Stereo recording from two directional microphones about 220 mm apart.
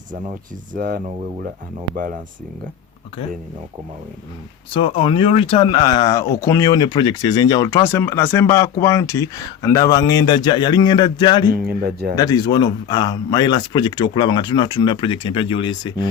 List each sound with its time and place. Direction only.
0.7 s speech: 40° right (ahead or behind)
4.7 s speech: 25° left (ahead or behind)
11.5 s speech: 45° right (ahead or behind)
12.1 s speech: 15° left (ahead or behind)